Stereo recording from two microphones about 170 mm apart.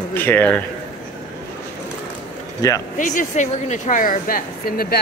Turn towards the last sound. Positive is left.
turn(degrees=60)  # may be behind; listen again after turning